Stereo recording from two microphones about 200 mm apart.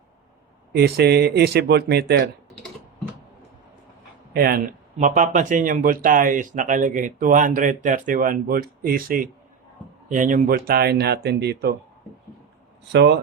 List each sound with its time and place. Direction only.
0.7 s speech: 55° right (ahead or behind)
4.4 s speech: 45° right (ahead or behind)
12.9 s speech: 60° right (ahead or behind)